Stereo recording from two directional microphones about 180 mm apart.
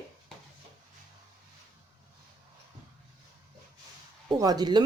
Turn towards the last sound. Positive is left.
turn(degrees=-25)  # may be behind; listen again after turning